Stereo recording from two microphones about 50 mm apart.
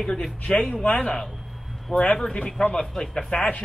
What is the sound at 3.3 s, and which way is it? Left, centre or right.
Speech, left.